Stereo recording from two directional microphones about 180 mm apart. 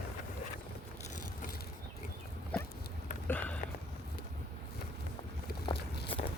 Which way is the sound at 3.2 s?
10° left (ahead or behind).